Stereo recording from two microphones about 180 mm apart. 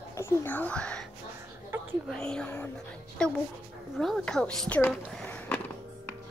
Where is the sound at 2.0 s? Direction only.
5° left (ahead or behind).